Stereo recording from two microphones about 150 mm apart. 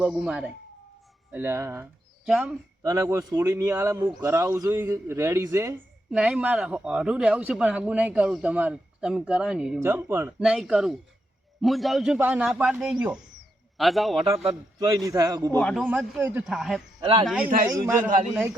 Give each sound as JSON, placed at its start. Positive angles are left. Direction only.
{"t": 0.0, "sound": "speech", "side_deg": -5}
{"t": 2.2, "sound": "speech", "side_deg": -5}
{"t": 2.8, "sound": "a man's voice", "side_deg": -20}
{"t": 6.1, "sound": "speech", "side_deg": -5}
{"t": 9.8, "sound": "speech", "side_deg": -15}
{"t": 10.4, "sound": "speech", "side_deg": -5}
{"t": 14.3, "sound": "a man's voice", "side_deg": -40}
{"t": 14.8, "sound": "a man's voice", "side_deg": -25}
{"t": 15.7, "sound": "speech", "side_deg": -10}
{"t": 17.0, "sound": "speech", "side_deg": -35}
{"t": 17.2, "sound": "speech", "side_deg": -5}